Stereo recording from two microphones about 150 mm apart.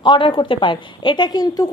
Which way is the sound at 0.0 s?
30° left (ahead or behind).